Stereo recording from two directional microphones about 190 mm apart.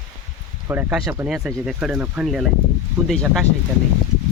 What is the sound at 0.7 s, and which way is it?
Speech, 10° right (ahead or behind).